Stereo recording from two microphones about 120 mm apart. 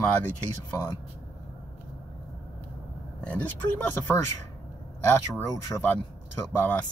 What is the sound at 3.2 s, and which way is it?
Speech, 10° left (ahead or behind).